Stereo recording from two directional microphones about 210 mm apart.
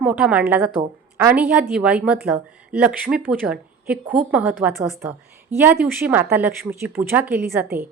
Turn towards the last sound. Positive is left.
turn(degrees=-5)  # may be behind; listen again after turning